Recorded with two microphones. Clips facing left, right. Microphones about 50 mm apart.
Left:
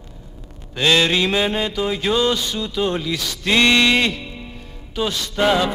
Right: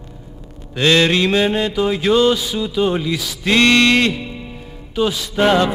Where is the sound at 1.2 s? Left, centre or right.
Centre.